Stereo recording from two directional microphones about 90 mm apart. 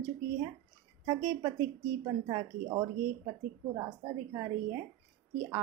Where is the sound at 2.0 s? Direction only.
50° right (ahead or behind).